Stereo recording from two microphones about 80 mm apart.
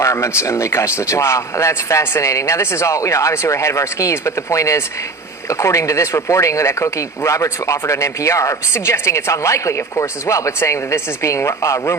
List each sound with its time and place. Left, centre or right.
0.0 s speech: left